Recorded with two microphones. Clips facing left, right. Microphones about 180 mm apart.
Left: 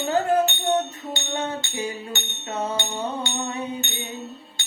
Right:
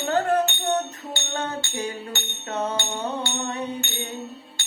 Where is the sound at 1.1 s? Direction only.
15° left (ahead or behind).